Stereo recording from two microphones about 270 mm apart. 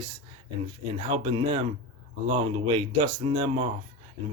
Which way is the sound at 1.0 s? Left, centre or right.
Centre.